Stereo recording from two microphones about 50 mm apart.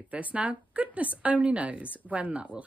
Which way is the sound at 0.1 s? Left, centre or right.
Right.